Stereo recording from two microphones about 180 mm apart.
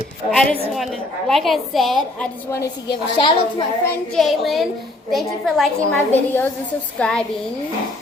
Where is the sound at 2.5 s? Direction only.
20° left (ahead or behind).